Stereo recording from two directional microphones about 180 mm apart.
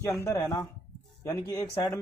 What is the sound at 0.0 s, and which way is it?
Speech, 15° left (ahead or behind).